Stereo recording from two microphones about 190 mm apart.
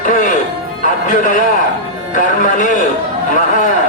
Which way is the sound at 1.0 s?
45° left (ahead or behind).